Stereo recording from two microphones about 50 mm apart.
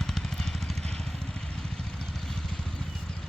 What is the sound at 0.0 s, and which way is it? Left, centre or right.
Vehicle, centre.